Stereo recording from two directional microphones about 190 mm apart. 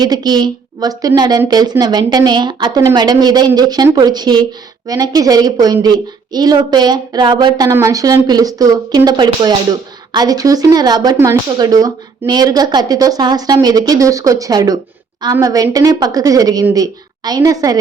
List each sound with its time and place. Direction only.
0.0 s speech: 20° right (ahead or behind)